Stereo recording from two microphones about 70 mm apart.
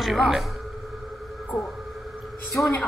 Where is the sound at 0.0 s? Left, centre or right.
Centre.